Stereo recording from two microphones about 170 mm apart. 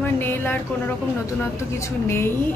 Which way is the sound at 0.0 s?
10° left (ahead or behind).